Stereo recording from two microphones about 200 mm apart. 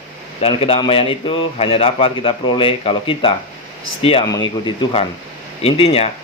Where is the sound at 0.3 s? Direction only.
30° left (ahead or behind).